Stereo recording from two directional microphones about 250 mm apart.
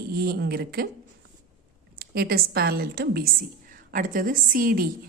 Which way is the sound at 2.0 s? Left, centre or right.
Right.